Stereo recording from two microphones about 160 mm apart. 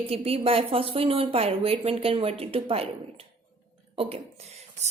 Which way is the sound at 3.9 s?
40° right (ahead or behind).